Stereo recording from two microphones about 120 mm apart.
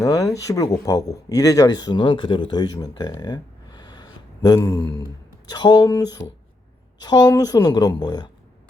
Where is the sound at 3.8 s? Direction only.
35° left (ahead or behind).